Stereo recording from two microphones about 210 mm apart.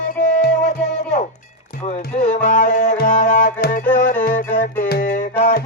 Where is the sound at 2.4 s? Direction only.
35° left (ahead or behind).